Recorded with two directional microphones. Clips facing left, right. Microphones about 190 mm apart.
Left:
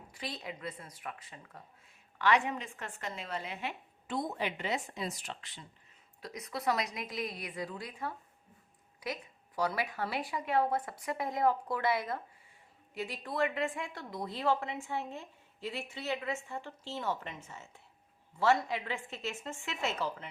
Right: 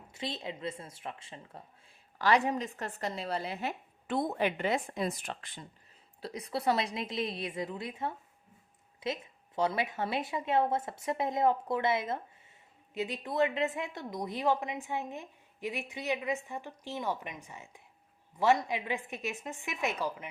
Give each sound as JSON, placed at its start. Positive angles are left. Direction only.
{"t": 0.1, "sound": "a woman's voice", "side_deg": -25}
{"t": 4.0, "sound": "speech", "side_deg": -60}
{"t": 6.2, "sound": "a woman's voice", "side_deg": -30}